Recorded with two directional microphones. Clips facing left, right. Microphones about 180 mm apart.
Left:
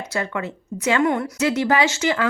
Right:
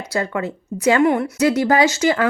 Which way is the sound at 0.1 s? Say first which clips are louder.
Right 5 dB; 35° right (ahead or behind).